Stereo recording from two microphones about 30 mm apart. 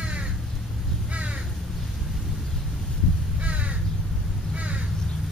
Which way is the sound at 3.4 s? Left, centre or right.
Right.